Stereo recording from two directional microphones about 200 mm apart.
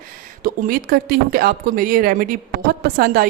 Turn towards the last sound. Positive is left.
turn(degrees=-45)  # may be behind; listen again after turning